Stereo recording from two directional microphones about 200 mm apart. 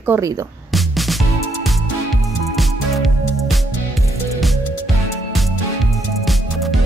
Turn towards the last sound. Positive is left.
turn(degrees=0)  # may be behind; listen again after turning